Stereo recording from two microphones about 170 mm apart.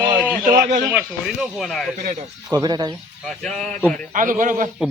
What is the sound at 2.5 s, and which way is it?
Speech, 25° right (ahead or behind).